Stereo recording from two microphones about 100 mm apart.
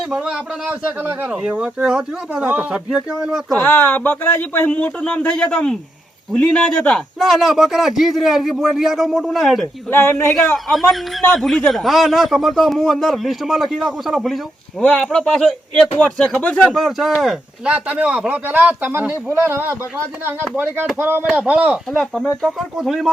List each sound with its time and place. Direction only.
0.7 s speech: 15° right (ahead or behind)
3.6 s a man's voice: 20° left (ahead or behind)
7.2 s a man's voice: centre (ahead or behind)
9.9 s a man's voice: 25° left (ahead or behind)
11.3 s a man's voice: centre (ahead or behind)
14.8 s a man's voice: 10° left (ahead or behind)
16.7 s a man's voice: centre (ahead or behind); by 19.7 s 25° right (ahead or behind)
21.0 s speech: 20° right (ahead or behind)
22.4 s a man's voice: centre (ahead or behind)